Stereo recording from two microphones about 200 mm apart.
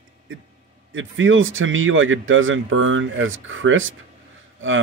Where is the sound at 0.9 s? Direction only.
75° right (ahead or behind).